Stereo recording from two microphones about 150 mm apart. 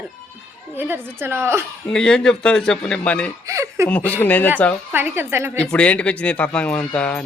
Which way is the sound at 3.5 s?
20° right (ahead or behind).